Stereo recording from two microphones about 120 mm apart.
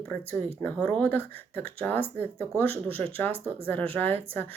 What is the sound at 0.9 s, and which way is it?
Speech, 15° left (ahead or behind).